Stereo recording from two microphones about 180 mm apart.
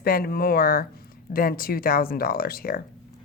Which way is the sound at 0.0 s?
55° left (ahead or behind).